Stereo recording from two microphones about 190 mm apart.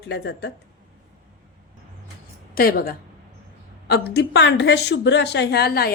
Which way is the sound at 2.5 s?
50° left (ahead or behind).